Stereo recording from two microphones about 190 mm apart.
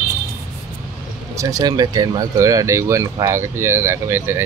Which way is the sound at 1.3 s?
20° right (ahead or behind).